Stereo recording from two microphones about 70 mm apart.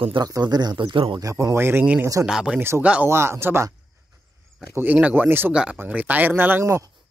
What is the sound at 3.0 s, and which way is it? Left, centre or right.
Speech, right.